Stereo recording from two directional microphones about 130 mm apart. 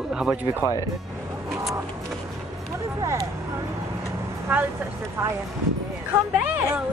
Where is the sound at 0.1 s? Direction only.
5° right (ahead or behind).